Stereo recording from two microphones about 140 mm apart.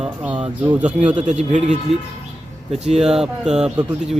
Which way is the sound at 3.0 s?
5° right (ahead or behind).